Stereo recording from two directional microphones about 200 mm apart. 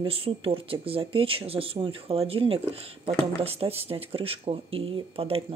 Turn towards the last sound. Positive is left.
turn(degrees=-30)  # may be behind; listen again after turning